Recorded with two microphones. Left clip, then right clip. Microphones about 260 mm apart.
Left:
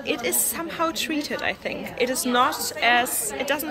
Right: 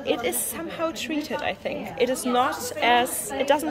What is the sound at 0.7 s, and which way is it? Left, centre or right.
A woman's voice, centre.